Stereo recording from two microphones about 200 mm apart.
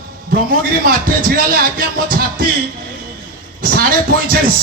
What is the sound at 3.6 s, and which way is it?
Speech, 45° right (ahead or behind).